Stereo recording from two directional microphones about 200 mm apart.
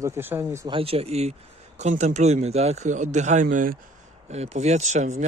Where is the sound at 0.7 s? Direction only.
30° right (ahead or behind).